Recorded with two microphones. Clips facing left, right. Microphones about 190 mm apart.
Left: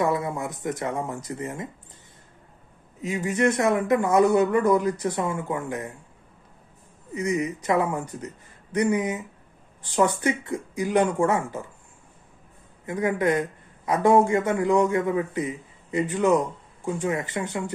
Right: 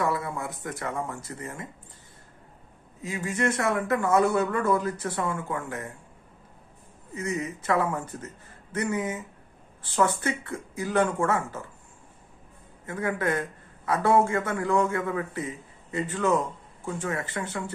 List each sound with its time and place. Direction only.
0.0 s speech: 20° left (ahead or behind)
3.0 s a man's voice: 20° left (ahead or behind)
7.2 s a man's voice: 15° left (ahead or behind)
12.8 s a man's voice: 15° left (ahead or behind)